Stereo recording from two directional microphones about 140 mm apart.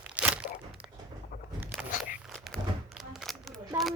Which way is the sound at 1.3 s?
90° left.